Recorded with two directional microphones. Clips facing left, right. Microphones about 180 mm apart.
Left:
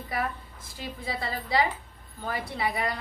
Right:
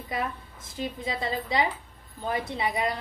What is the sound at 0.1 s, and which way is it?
Speech, 20° right (ahead or behind).